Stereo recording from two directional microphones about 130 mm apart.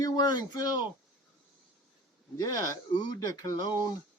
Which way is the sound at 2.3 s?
30° left (ahead or behind).